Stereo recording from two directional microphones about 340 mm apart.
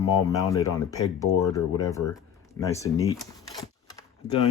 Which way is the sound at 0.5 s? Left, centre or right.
Centre.